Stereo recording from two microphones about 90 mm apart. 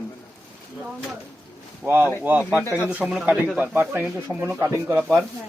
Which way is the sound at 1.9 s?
20° right (ahead or behind).